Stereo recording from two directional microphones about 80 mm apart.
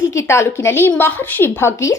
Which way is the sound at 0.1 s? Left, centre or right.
Left.